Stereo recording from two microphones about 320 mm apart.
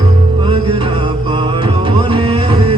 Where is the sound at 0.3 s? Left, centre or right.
Centre.